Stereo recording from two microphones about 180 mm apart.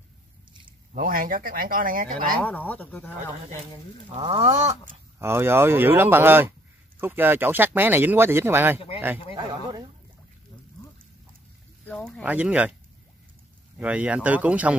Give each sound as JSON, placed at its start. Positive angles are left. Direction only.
{"t": 0.9, "sound": "speech", "side_deg": -50}
{"t": 2.4, "sound": "speech", "side_deg": 10}
{"t": 4.1, "sound": "a sound", "side_deg": -35}
{"t": 5.2, "sound": "speech", "side_deg": -15}
{"t": 8.7, "sound": "speech", "side_deg": 30}
{"t": 9.3, "sound": "speech", "side_deg": -25}
{"t": 11.8, "sound": "speech", "side_deg": 5}
{"t": 12.3, "sound": "speech", "side_deg": -10}
{"t": 13.7, "sound": "speech", "side_deg": -5}